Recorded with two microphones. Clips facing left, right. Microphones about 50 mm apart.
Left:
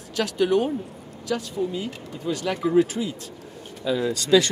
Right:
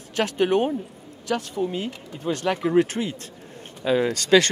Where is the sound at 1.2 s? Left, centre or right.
Right.